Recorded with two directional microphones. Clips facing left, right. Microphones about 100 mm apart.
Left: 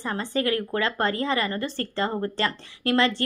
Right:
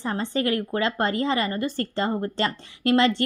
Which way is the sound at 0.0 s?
20° right (ahead or behind).